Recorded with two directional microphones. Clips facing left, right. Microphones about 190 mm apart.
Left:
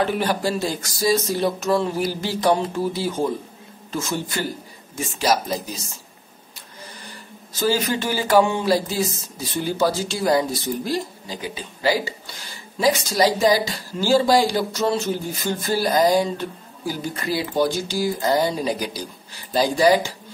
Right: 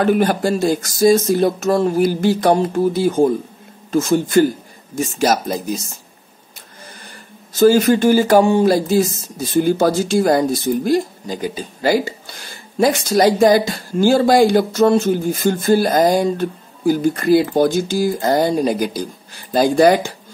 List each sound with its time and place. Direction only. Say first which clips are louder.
0.0 s speech: right 6 dB; 50° right (ahead or behind)
7.0 s speech: even; 50° right (ahead or behind)